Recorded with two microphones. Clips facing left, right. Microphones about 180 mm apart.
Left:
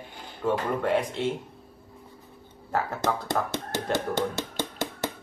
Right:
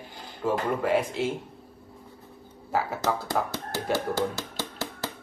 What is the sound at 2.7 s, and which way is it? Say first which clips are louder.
Speech: even; 5° right (ahead or behind).